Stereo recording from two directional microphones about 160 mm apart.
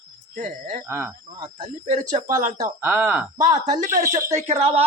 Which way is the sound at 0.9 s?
15° right (ahead or behind).